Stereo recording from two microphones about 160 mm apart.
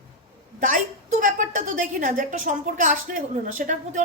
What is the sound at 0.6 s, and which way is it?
A woman's voice, 55° right (ahead or behind).